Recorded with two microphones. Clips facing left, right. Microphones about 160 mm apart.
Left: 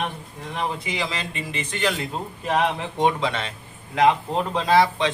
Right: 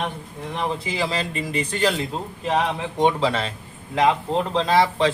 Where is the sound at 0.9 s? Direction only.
35° right (ahead or behind).